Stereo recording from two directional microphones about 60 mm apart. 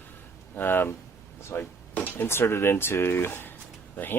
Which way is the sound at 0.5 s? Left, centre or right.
Left.